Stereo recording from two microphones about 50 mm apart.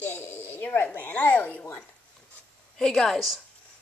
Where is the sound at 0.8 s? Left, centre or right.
Left.